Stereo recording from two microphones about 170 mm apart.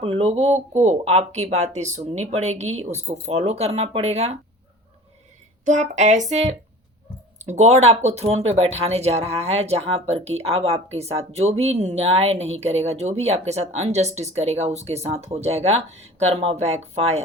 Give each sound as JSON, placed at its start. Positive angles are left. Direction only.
{"t": 0.0, "sound": "speech", "side_deg": -35}
{"t": 5.6, "sound": "speech", "side_deg": -45}